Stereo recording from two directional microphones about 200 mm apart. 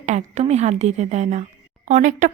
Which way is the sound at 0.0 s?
35° right (ahead or behind).